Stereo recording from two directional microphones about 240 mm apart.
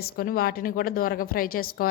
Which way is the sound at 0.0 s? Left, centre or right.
Left.